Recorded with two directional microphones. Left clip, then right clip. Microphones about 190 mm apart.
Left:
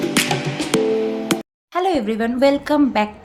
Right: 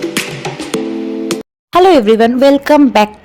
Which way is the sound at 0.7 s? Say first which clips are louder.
Left 1 dB; centre (ahead or behind).